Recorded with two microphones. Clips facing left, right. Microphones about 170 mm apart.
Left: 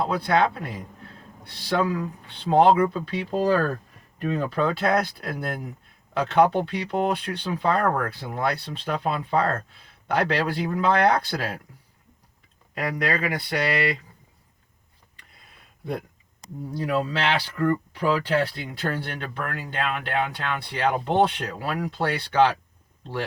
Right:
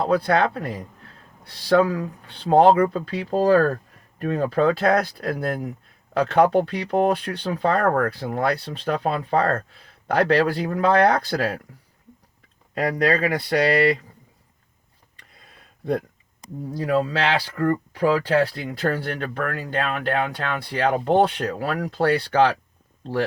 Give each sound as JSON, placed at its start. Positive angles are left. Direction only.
{"t": 0.0, "sound": "speech", "side_deg": -45}
{"t": 12.7, "sound": "speech", "side_deg": -35}
{"t": 16.8, "sound": "speech", "side_deg": -45}